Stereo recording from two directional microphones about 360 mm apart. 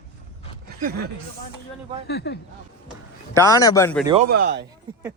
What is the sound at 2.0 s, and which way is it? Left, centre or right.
Speech, left.